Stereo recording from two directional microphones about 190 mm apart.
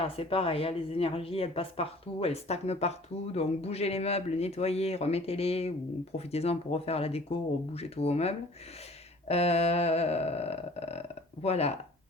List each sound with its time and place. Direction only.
0.0 s speech: 30° left (ahead or behind)